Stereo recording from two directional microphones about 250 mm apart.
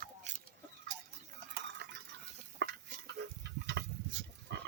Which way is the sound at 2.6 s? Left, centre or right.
Right.